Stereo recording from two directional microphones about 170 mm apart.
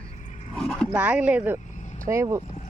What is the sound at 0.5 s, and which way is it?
Dog, centre (ahead or behind).